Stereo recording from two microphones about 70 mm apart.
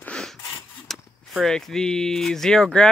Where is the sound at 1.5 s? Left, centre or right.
Centre.